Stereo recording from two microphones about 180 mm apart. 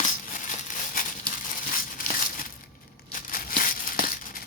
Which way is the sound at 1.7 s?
50° left (ahead or behind).